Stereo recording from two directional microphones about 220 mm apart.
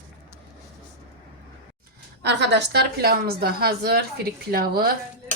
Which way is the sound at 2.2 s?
50° right (ahead or behind).